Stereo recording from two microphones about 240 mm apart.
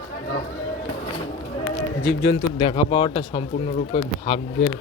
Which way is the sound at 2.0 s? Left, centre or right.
Left.